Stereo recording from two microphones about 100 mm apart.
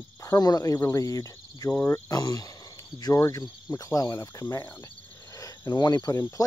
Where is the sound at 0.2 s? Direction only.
35° left (ahead or behind).